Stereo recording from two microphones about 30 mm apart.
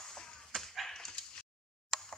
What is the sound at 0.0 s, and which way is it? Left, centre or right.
Whip, centre.